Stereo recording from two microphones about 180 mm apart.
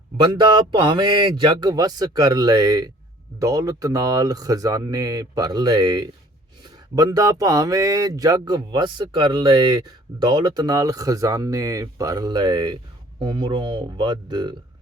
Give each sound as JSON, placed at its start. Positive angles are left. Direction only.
{"t": 0.2, "sound": "speech", "side_deg": -25}